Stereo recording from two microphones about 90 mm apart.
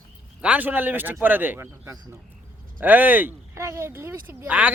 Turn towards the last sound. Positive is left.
turn(degrees=-20)  # may be behind; listen again after turning